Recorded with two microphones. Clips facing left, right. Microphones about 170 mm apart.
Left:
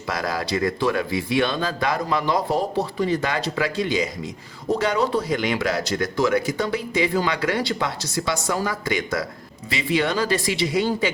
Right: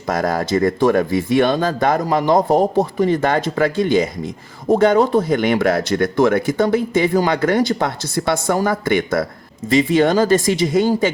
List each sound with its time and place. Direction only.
0.1 s speech: 50° right (ahead or behind)